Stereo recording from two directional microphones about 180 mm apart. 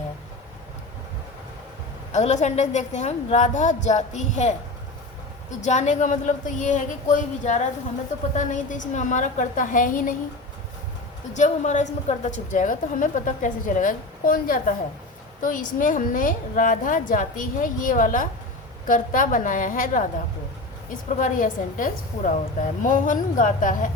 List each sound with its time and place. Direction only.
2.1 s a woman's voice: 40° left (ahead or behind)
5.6 s a woman's voice: 40° left (ahead or behind)
11.3 s a woman's voice: 40° left (ahead or behind)